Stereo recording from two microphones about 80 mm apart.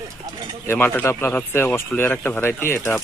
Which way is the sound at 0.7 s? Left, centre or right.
Left.